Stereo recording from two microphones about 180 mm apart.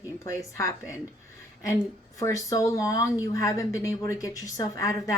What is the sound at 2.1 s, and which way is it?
A woman's voice, 15° left (ahead or behind).